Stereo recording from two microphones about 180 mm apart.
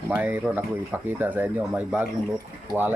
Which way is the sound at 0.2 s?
10° right (ahead or behind).